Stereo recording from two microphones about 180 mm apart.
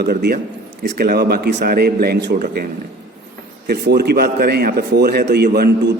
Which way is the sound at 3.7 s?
60° right (ahead or behind).